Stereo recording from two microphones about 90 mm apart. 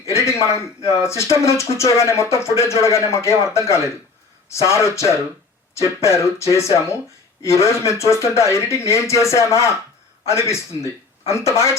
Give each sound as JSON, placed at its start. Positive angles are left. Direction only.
{"t": 0.1, "sound": "speech", "side_deg": 35}